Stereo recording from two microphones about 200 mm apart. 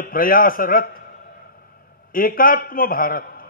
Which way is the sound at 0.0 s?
45° left (ahead or behind).